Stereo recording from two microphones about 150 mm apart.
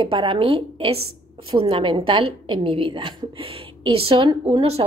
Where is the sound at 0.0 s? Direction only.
35° right (ahead or behind).